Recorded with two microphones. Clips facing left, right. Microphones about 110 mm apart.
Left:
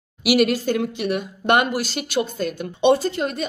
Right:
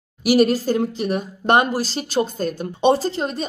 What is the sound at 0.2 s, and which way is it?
Speech, 40° right (ahead or behind).